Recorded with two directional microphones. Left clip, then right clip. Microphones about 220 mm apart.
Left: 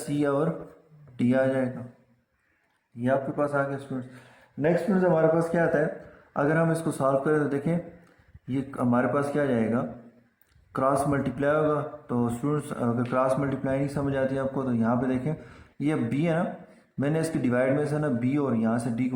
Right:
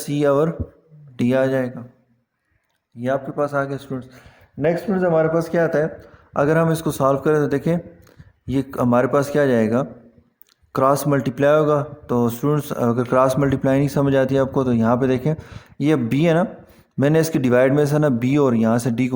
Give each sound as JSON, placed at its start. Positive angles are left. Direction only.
{"t": 0.1, "sound": "a man's voice", "side_deg": -45}
{"t": 3.0, "sound": "a man's voice", "side_deg": -45}